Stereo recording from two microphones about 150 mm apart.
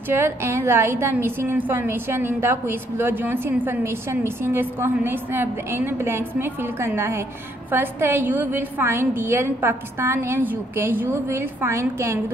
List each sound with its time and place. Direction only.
0.1 s a woman's voice: 15° right (ahead or behind)